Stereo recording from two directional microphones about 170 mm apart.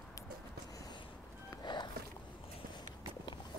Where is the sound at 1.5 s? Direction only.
25° left (ahead or behind).